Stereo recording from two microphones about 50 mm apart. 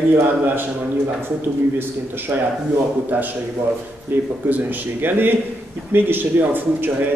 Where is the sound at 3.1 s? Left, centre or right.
Right.